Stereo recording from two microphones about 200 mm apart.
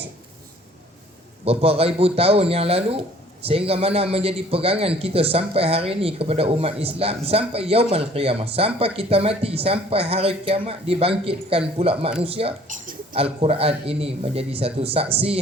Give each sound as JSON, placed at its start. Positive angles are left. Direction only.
{"t": 1.5, "sound": "a man's voice", "side_deg": -30}